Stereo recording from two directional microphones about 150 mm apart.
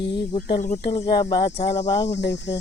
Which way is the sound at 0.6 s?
55° left (ahead or behind).